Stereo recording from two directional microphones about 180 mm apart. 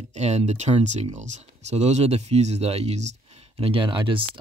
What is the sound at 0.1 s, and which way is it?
Speech, 40° right (ahead or behind).